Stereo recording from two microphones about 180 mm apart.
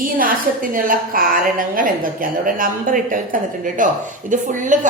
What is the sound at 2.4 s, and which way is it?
A woman's voice, 50° right (ahead or behind).